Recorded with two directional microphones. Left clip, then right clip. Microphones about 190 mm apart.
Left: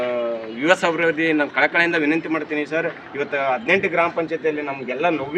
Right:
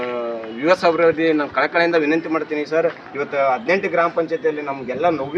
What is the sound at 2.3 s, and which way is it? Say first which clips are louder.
Speech: right 3 dB; 25° left (ahead or behind).